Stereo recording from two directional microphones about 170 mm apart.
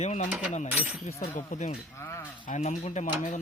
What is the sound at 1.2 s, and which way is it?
Speech, 45° left (ahead or behind).